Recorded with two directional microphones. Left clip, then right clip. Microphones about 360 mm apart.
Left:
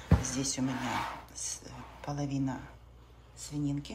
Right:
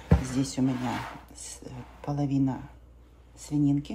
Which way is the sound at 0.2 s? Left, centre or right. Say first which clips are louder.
Right 5 dB; centre.